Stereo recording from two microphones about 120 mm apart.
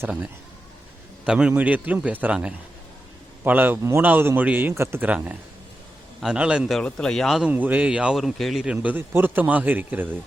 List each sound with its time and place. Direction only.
1.2 s a man's voice: 10° right (ahead or behind)
6.7 s speech: 5° left (ahead or behind)
7.5 s a man's voice: 15° right (ahead or behind)
8.6 s a man's voice: 10° right (ahead or behind)